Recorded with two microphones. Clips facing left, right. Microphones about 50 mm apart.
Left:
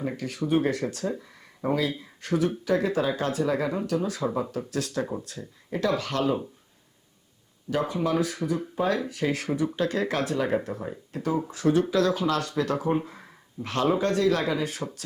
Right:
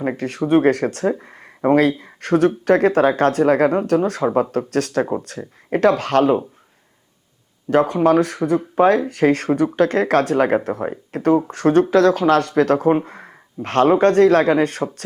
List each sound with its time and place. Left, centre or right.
0.0 s speech: right
1.2 s a sound: right
2.0 s speech: right
7.7 s speech: right
13.1 s a sound: right
14.0 s speech: right